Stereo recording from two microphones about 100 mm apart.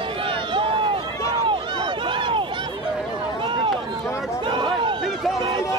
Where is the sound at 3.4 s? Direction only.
60° right (ahead or behind).